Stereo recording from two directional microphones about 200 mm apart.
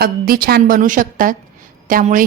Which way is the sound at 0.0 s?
50° right (ahead or behind).